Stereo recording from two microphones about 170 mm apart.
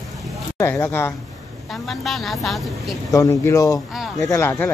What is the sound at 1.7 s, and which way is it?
A woman's voice, centre (ahead or behind).